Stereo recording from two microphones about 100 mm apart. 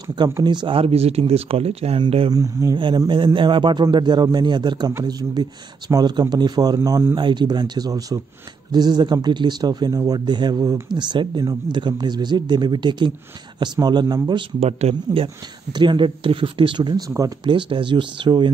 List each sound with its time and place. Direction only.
0.1 s speech: 45° right (ahead or behind)
0.7 s speech: 85° right
2.0 s speech: 65° right (ahead or behind)
2.3 s a man's voice: 35° right (ahead or behind)
3.3 s a man's voice: 55° right (ahead or behind); by 7.1 s 35° right (ahead or behind)
7.2 s speech: 50° right (ahead or behind)
10.9 s speech: 50° right (ahead or behind)
14.6 s speech: 90° right
15.7 s speech: 50° right (ahead or behind)